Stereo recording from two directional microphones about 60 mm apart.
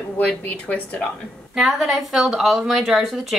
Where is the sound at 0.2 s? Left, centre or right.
Left.